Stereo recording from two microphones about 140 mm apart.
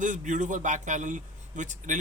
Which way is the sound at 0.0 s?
60° right (ahead or behind).